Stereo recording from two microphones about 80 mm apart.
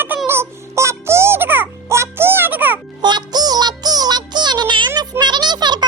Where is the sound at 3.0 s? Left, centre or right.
Right.